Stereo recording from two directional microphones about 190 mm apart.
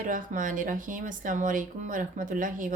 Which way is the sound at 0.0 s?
45° right (ahead or behind).